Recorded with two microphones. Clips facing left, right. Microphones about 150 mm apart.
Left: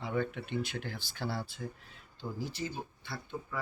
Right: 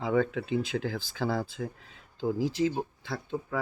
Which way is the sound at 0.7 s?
90° right.